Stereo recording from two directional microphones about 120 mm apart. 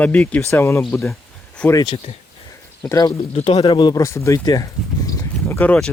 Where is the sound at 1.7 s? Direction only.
45° left (ahead or behind).